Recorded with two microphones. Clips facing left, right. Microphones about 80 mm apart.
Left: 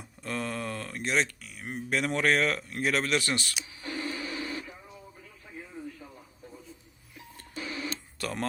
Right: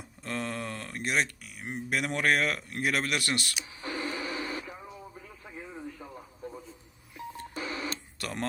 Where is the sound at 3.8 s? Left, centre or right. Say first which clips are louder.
Right 1 dB; right.